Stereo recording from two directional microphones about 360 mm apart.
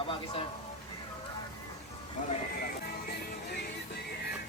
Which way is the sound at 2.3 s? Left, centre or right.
Left.